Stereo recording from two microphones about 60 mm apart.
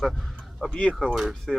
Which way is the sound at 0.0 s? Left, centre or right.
Centre.